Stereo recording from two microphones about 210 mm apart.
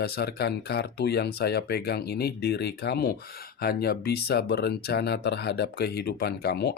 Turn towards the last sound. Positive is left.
turn(degrees=50)  # may be behind; listen again after turning